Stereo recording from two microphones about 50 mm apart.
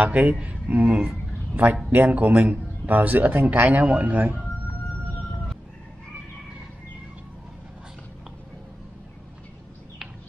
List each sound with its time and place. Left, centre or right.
0.0 s a man's voice: right